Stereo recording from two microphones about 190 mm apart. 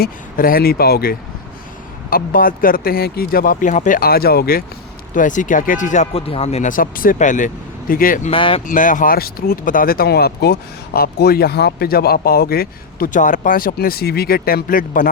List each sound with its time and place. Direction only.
0.0 s speech: 50° left (ahead or behind)
5.1 s speech: 40° left (ahead or behind)
8.3 s speech: 30° left (ahead or behind)
8.6 s speech: 45° left (ahead or behind)